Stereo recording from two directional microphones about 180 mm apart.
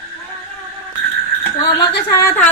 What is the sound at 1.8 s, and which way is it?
Speech, 15° left (ahead or behind).